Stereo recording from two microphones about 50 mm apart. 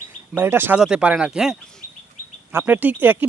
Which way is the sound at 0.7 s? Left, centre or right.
Centre.